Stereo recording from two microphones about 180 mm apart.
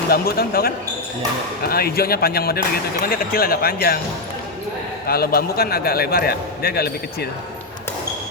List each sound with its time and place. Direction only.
0.1 s a man's voice: 60° left (ahead or behind)
5.0 s a man's voice: 60° left (ahead or behind)